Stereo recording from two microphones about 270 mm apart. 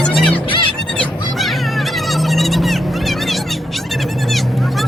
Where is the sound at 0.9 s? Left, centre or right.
Centre.